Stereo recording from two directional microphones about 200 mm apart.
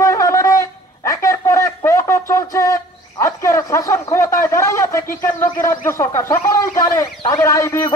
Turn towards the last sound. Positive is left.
turn(degrees=15)  # may be behind; listen again after turning